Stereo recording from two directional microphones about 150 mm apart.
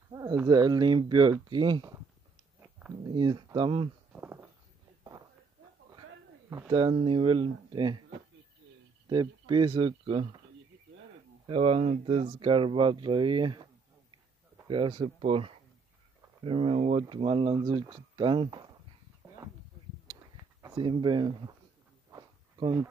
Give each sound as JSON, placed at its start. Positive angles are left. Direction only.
{"t": 0.1, "sound": "speech", "side_deg": -25}
{"t": 3.0, "sound": "speech", "side_deg": -30}
{"t": 4.1, "sound": "a sound", "side_deg": -15}
{"t": 6.7, "sound": "speech", "side_deg": -35}
{"t": 9.0, "sound": "speech", "side_deg": -30}
{"t": 11.4, "sound": "speech", "side_deg": -40}
{"t": 14.7, "sound": "speech", "side_deg": -30}
{"t": 20.6, "sound": "speech", "side_deg": -30}
{"t": 22.1, "sound": "a sound", "side_deg": -25}